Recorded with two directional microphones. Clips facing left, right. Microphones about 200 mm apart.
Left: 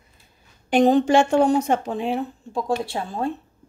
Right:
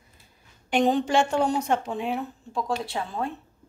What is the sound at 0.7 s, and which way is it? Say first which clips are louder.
A woman's voice: left 6 dB; 40° left (ahead or behind).